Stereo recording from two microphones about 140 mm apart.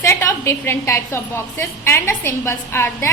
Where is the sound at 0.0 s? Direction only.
20° left (ahead or behind).